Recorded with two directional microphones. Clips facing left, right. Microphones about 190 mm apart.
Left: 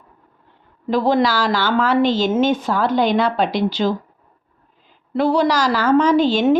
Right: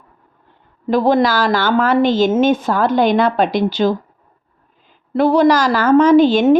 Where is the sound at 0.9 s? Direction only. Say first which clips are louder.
Right 3 dB; 50° right (ahead or behind).